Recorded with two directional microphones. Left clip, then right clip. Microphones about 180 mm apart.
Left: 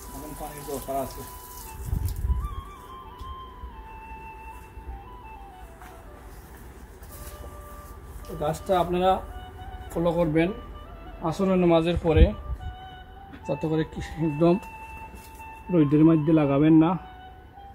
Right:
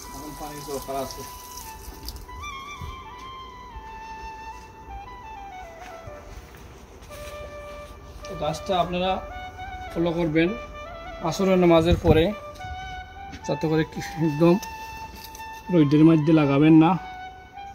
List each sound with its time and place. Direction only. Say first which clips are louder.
8.4 s speech: even; 40° left (ahead or behind)
11.2 s speech: right 3 dB; 20° right (ahead or behind); by 12.4 s 35° right (ahead or behind)
13.5 s speech: right 3 dB; 45° right (ahead or behind)
15.7 s speech: right 2 dB; 45° right (ahead or behind)